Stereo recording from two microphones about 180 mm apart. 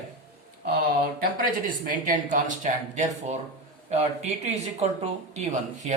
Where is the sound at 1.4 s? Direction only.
50° right (ahead or behind).